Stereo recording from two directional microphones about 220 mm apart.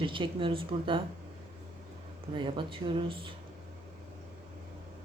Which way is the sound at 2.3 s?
20° right (ahead or behind).